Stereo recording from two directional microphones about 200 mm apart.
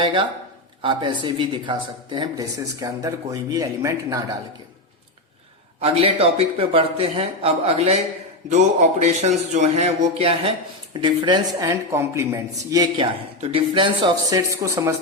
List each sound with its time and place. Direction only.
0.0 s a man's voice: 25° right (ahead or behind)
5.8 s a man's voice: 30° right (ahead or behind)